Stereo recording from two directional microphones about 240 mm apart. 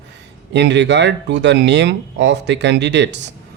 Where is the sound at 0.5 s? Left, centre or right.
Right.